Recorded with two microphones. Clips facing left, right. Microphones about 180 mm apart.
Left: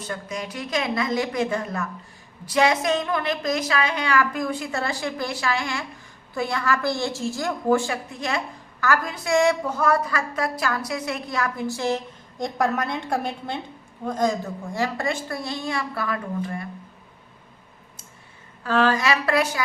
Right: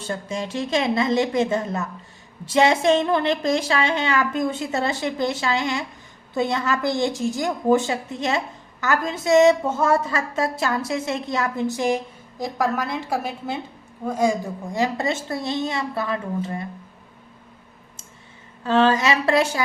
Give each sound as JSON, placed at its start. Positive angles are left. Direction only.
{"t": 0.0, "sound": "a woman's voice", "side_deg": -25}
{"t": 12.4, "sound": "a woman's voice", "side_deg": 0}
{"t": 18.6, "sound": "a woman's voice", "side_deg": -25}